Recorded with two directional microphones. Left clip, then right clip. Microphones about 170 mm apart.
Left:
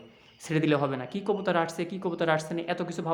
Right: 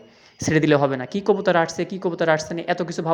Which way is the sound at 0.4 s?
25° right (ahead or behind).